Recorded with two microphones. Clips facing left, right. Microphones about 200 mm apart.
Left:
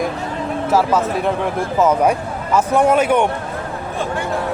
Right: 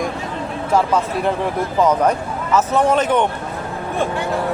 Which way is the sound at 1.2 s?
5° left (ahead or behind).